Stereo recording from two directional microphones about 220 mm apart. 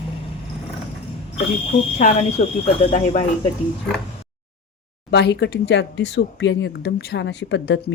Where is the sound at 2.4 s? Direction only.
30° left (ahead or behind).